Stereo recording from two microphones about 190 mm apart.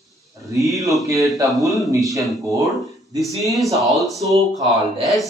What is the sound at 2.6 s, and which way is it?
Speech, centre (ahead or behind).